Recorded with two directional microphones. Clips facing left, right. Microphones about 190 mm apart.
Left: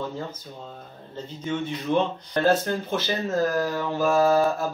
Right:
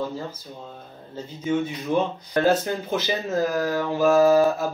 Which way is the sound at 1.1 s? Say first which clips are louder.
Right 5 dB; 5° right (ahead or behind).